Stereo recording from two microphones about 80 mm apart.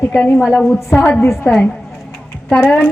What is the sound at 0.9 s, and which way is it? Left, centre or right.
Speech, left.